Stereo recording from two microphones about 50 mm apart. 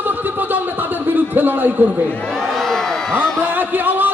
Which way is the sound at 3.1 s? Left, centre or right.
Right.